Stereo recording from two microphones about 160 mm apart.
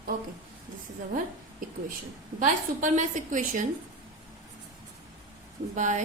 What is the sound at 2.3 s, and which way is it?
A woman's voice, 55° right (ahead or behind).